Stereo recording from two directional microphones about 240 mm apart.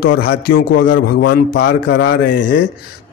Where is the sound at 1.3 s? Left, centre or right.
Left.